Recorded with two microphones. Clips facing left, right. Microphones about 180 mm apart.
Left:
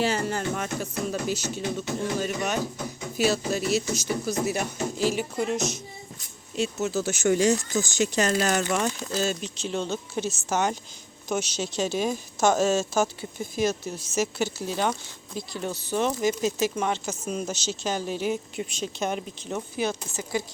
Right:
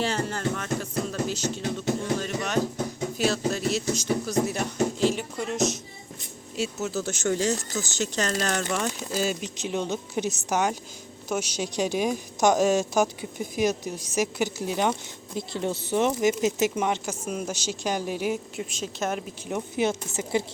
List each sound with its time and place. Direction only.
0.0 s speech: 10° left (ahead or behind)
19.5 s speech: 15° right (ahead or behind)